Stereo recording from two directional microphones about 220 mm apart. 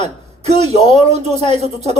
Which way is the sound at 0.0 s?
30° right (ahead or behind).